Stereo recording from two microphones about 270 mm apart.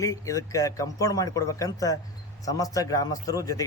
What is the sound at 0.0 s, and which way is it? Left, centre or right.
Speech, centre.